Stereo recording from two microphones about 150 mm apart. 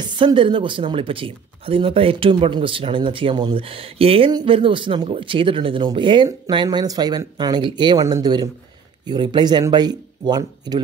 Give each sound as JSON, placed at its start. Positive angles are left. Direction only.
{"t": 0.0, "sound": "speech", "side_deg": -30}